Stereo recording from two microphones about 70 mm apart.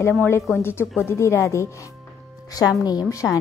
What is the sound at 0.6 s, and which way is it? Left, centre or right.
A woman's voice, left.